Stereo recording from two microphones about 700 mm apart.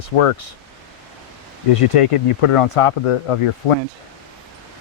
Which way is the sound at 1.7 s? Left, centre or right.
Left.